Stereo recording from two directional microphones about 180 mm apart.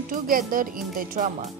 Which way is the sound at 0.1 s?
50° right (ahead or behind).